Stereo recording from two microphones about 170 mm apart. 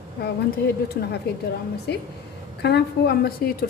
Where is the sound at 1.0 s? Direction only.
65° left (ahead or behind).